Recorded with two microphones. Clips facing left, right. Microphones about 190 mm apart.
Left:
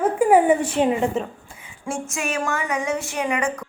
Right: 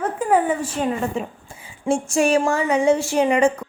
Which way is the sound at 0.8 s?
25° left (ahead or behind).